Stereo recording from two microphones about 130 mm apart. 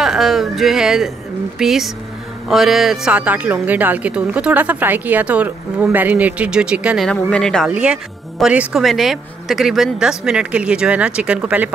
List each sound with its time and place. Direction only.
0.0 s a woman's voice: centre (ahead or behind)
7.1 s speech: 5° left (ahead or behind)
7.6 s a woman's voice: 5° right (ahead or behind)